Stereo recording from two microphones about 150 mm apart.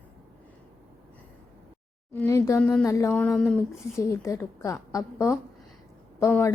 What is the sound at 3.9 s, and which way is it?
A woman's voice, 20° left (ahead or behind).